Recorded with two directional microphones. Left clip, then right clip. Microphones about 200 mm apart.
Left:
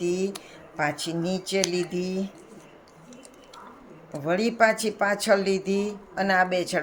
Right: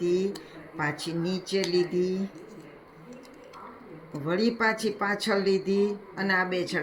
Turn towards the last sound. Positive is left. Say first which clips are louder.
# left 4 dB
turn(degrees=70)  # may be behind; listen again after turning